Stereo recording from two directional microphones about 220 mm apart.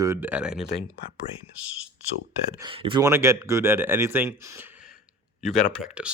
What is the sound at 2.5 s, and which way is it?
Speech, 20° right (ahead or behind).